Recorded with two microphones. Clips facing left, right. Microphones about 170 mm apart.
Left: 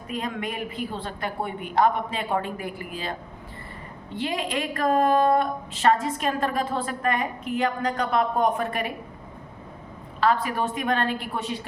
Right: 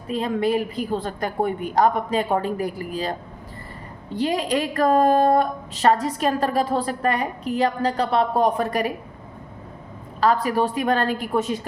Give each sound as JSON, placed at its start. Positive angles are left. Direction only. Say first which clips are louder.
{"t": 0.1, "sound": "a woman's voice", "louder": "right 9 dB", "side_deg": -30}
{"t": 10.2, "sound": "a woman's voice", "louder": "right 4 dB", "side_deg": -40}